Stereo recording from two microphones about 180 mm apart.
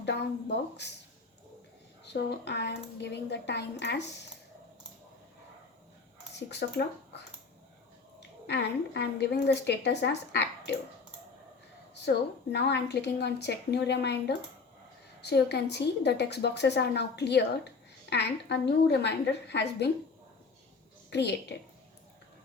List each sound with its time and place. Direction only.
0.0 s a woman's voice: 75° left (ahead or behind)
2.1 s a woman's voice: 70° left (ahead or behind)
6.5 s a woman's voice: 70° left (ahead or behind)
8.4 s a woman's voice: 70° left (ahead or behind)
12.0 s a woman's voice: 70° left (ahead or behind)